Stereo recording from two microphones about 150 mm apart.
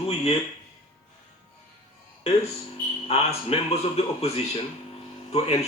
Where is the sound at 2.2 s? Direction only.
45° left (ahead or behind).